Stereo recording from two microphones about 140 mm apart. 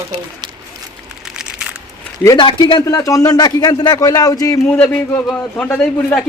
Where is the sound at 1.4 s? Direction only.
5° right (ahead or behind).